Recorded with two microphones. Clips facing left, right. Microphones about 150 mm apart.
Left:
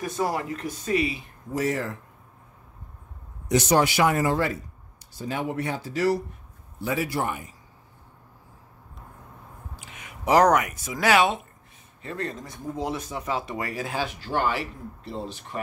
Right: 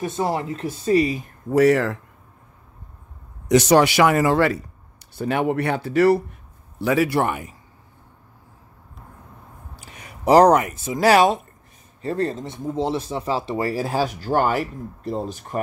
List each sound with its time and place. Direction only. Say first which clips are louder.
0.0 s speech: right 3 dB; 25° right (ahead or behind); by 1.3 s 40° right (ahead or behind)
1.5 s a man's voice: right 10 dB; 70° right (ahead or behind)
3.4 s speech: right 6 dB; 90° right
5.1 s speech: right 7 dB; 65° right (ahead or behind)
6.8 s a man's voice: right 7 dB; 75° right (ahead or behind)
9.8 s speech: right 2 dB; 35° right (ahead or behind)